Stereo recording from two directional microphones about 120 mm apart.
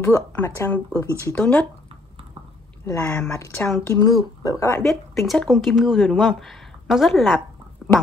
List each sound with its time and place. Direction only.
0.0 s speech: 20° left (ahead or behind)
2.8 s speech: 20° left (ahead or behind)
4.8 s speech: centre (ahead or behind)
7.8 s a sound: centre (ahead or behind)